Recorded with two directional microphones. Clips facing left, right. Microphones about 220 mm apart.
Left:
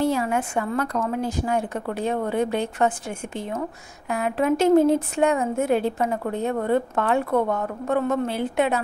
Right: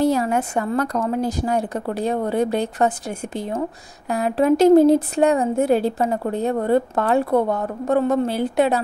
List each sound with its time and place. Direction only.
0.0 s a woman's voice: 40° right (ahead or behind)